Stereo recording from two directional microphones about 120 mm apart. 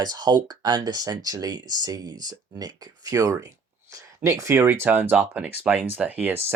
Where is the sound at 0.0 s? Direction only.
35° right (ahead or behind).